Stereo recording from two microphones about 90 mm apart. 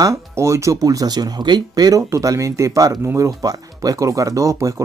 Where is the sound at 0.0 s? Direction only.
35° right (ahead or behind).